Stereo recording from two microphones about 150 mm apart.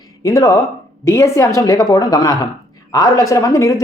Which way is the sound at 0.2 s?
25° left (ahead or behind).